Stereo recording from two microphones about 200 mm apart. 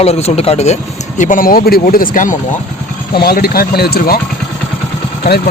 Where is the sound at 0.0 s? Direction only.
30° left (ahead or behind).